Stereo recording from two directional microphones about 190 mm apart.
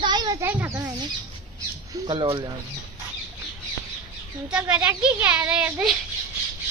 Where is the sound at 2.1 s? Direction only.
25° right (ahead or behind).